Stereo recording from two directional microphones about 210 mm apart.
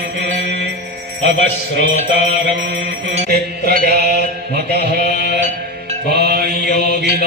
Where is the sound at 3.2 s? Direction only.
45° right (ahead or behind).